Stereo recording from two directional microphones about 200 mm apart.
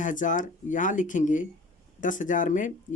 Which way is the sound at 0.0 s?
40° left (ahead or behind).